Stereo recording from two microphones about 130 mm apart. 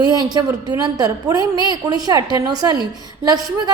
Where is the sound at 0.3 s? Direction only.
30° right (ahead or behind).